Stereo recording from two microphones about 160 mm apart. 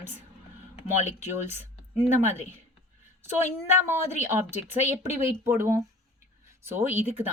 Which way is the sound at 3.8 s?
15° right (ahead or behind).